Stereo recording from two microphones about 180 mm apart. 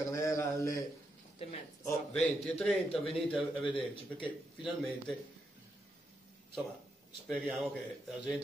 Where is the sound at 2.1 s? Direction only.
5° left (ahead or behind).